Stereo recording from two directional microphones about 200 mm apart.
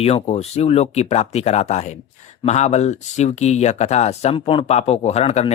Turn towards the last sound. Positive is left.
turn(degrees=35)  # may be behind; listen again after turning